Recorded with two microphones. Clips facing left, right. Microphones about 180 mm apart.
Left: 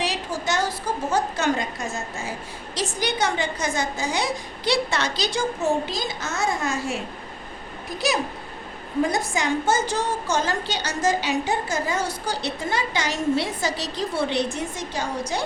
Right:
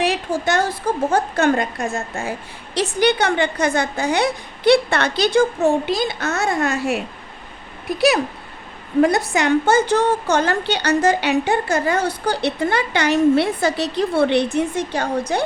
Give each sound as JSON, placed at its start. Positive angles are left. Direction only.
{"t": 0.0, "sound": "a woman's voice", "side_deg": -55}